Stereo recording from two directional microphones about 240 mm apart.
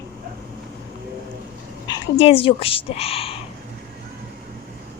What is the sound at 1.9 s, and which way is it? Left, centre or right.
A woman's voice, left.